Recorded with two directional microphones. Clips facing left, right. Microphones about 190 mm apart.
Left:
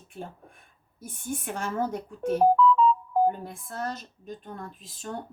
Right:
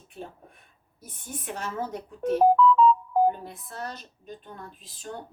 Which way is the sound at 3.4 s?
50° left (ahead or behind).